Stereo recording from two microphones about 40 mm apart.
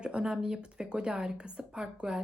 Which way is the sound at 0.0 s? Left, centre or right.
Right.